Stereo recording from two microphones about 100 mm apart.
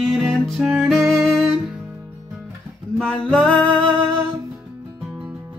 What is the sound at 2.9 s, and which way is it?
Music, 10° left (ahead or behind).